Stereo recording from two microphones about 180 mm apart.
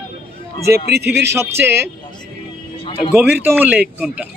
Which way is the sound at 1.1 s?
15° right (ahead or behind).